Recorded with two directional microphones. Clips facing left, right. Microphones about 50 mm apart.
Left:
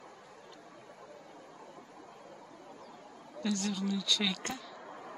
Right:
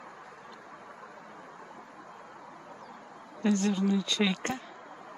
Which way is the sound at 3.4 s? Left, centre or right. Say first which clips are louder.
Right 7 dB; right.